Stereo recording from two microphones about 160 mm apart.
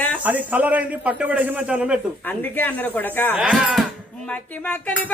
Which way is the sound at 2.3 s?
10° left (ahead or behind).